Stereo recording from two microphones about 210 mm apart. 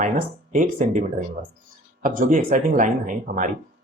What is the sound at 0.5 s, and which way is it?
Speech, 40° right (ahead or behind).